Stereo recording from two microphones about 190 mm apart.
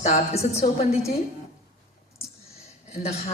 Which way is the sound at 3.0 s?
35° left (ahead or behind).